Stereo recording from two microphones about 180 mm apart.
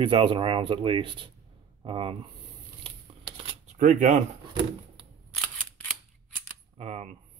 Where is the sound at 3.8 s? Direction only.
40° right (ahead or behind).